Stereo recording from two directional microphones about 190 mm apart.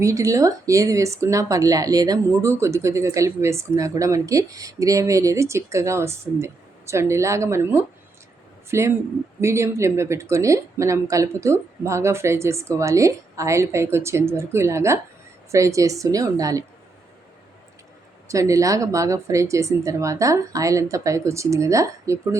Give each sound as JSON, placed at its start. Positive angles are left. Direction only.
{"t": 0.0, "sound": "speech", "side_deg": -15}
{"t": 18.3, "sound": "speech", "side_deg": -15}